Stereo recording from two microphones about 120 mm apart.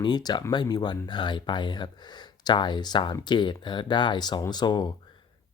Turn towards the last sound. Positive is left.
turn(degrees=40)  # may be behind; listen again after turning